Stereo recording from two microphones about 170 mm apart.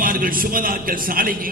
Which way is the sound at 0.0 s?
55° right (ahead or behind).